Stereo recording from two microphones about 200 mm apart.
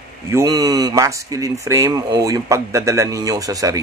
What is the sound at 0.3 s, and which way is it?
Speech, 15° right (ahead or behind).